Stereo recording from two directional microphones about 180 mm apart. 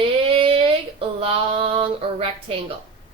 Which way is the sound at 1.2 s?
30° right (ahead or behind).